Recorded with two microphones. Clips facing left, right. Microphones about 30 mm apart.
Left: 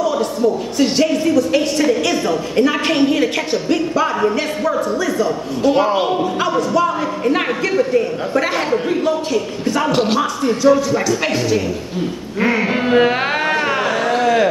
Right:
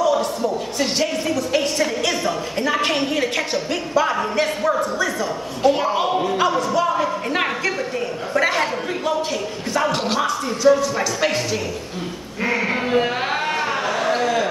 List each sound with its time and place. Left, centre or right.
0.0 s speech: centre
5.8 s speech: centre
6.1 s speech: centre
12.9 s a sound: left